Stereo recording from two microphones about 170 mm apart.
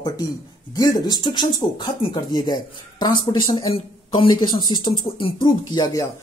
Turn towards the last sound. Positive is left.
turn(degrees=25)  # may be behind; listen again after turning